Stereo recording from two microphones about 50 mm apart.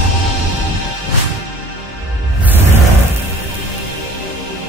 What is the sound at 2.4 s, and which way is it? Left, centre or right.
Music, right.